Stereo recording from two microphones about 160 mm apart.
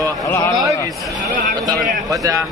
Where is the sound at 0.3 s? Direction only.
20° left (ahead or behind).